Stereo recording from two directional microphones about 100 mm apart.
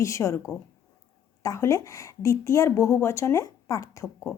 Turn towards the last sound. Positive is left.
turn(degrees=30)  # may be behind; listen again after turning